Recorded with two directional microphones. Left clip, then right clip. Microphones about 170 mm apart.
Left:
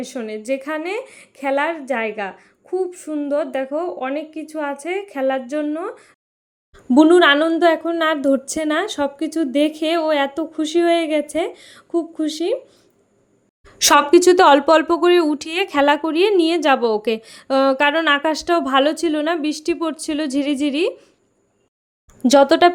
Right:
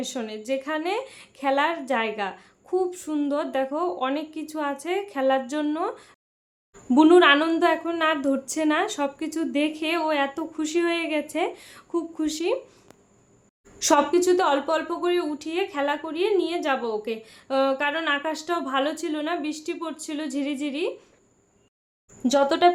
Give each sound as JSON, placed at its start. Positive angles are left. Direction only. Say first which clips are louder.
{"t": 0.0, "sound": "a woman's voice", "louder": "left 4 dB", "side_deg": 15}
{"t": 6.9, "sound": "a woman's voice", "louder": "left 4 dB", "side_deg": 25}
{"t": 13.7, "sound": "a woman's voice", "louder": "left 8 dB", "side_deg": 55}
{"t": 22.2, "sound": "a woman's voice", "louder": "left 7 dB", "side_deg": 35}